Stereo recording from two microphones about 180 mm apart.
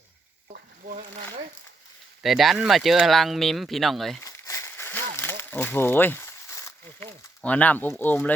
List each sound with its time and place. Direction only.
0.4 s frying: 45° right (ahead or behind)
2.2 s speech: centre (ahead or behind)
4.2 s a sound: 15° left (ahead or behind)